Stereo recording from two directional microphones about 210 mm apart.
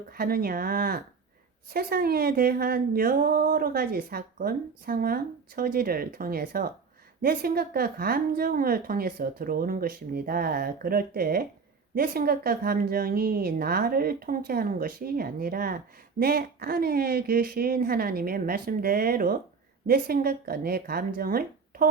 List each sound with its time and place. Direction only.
0.1 s a woman's voice: 45° right (ahead or behind)